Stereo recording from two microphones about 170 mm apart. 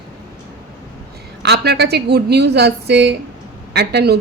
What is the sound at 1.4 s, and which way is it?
A woman's voice, 75° right (ahead or behind).